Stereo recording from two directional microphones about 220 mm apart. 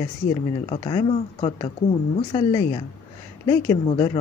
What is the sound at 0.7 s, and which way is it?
A woman's voice, 20° left (ahead or behind).